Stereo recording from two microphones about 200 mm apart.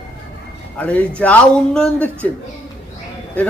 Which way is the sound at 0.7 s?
5° left (ahead or behind).